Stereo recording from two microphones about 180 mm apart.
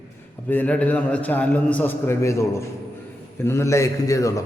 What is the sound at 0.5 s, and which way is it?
A man's voice, 10° left (ahead or behind).